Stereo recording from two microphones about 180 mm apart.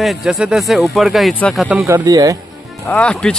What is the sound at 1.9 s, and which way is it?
Speech, 20° right (ahead or behind).